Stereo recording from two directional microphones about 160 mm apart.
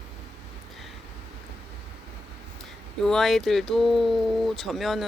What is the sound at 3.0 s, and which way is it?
Speech, centre (ahead or behind).